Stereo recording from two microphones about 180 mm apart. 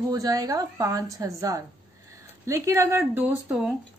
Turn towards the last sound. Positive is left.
turn(degrees=-5)  # may be behind; listen again after turning